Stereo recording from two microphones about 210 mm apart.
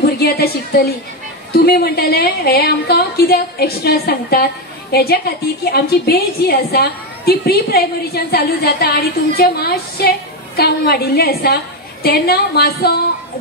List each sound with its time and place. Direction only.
0.2 s a woman's voice: 50° left (ahead or behind)